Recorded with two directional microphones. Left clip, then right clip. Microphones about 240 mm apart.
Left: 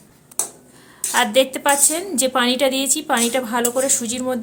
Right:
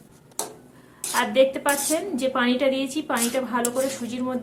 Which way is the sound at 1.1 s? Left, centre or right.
Left.